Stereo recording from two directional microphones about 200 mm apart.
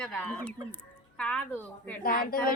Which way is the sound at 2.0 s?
45° left (ahead or behind).